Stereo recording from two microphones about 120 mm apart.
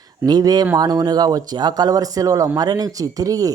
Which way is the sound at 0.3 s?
35° right (ahead or behind).